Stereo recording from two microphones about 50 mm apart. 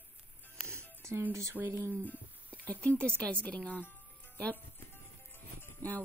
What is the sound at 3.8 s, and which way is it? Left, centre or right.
Music, left.